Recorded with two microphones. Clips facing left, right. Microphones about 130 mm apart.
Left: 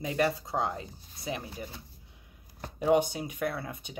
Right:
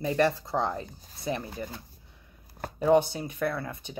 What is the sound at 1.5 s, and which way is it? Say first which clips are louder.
Speech: right 4 dB; 50° right (ahead or behind).